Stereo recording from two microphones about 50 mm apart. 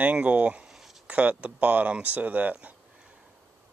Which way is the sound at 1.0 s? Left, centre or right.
Right.